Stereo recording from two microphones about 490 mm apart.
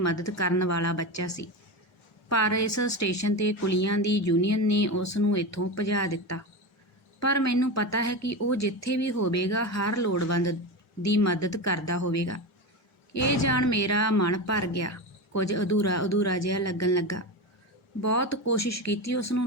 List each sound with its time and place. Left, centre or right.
0.0 s a woman's voice: left